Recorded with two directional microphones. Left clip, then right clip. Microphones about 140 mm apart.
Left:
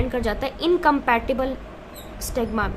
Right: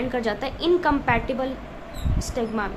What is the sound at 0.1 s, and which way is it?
A woman's voice, 25° left (ahead or behind).